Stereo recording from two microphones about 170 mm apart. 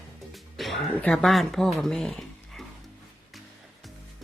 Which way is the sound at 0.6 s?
Centre (ahead or behind).